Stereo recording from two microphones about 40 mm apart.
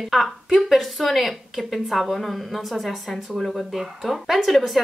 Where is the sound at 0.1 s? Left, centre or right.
Centre.